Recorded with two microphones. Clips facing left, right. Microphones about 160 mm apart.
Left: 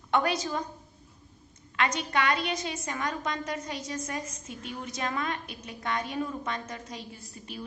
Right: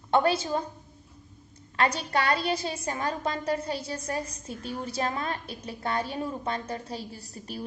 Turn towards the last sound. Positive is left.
turn(degrees=-40)  # may be behind; listen again after turning